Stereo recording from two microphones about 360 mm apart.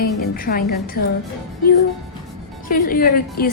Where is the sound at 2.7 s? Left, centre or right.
Left.